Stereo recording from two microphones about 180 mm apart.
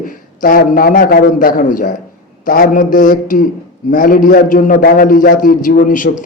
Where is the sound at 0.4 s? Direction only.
50° left (ahead or behind).